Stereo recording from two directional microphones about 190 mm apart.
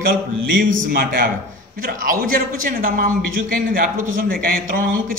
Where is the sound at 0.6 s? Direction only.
50° right (ahead or behind).